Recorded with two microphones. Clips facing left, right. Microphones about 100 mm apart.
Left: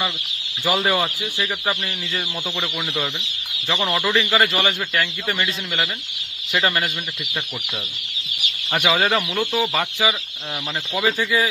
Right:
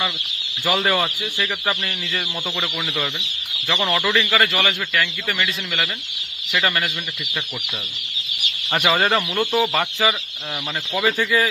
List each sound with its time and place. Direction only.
0.6 s speech: 5° left (ahead or behind)
3.8 s speech: 15° left (ahead or behind)
8.7 s speech: centre (ahead or behind)
10.0 s speech: 10° left (ahead or behind)